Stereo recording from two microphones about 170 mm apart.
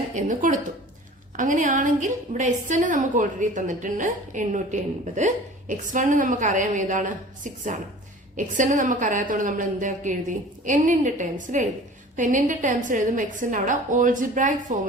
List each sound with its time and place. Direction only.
0.2 s a woman's voice: 50° right (ahead or behind)